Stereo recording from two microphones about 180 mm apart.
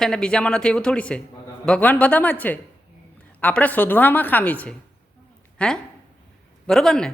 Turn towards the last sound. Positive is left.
turn(degrees=5)  # may be behind; listen again after turning